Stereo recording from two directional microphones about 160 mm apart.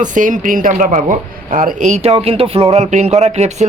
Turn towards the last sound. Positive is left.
turn(degrees=-45)  # may be behind; listen again after turning